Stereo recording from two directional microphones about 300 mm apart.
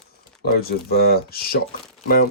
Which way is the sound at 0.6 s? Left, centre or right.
Left.